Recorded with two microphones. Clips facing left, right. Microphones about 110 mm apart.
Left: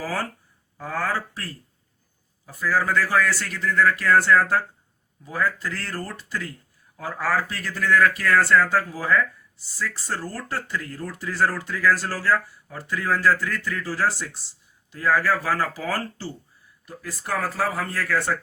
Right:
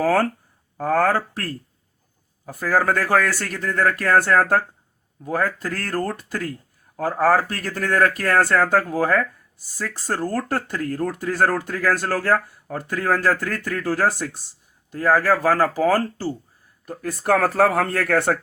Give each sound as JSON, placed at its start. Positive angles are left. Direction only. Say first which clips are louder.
{"t": 0.0, "sound": "speech", "louder": "right 10 dB", "side_deg": -50}